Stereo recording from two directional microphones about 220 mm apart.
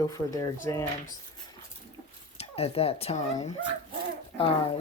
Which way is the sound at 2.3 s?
25° left (ahead or behind).